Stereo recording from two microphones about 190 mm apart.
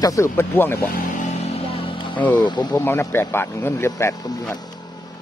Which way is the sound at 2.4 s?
25° left (ahead or behind).